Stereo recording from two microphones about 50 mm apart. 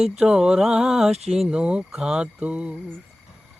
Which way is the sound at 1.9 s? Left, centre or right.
Centre.